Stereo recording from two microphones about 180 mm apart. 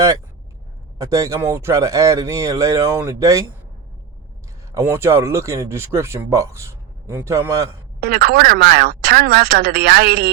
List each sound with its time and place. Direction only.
0.9 s speech: 20° right (ahead or behind)
4.7 s speech: 15° right (ahead or behind)
8.0 s speech: 60° right (ahead or behind)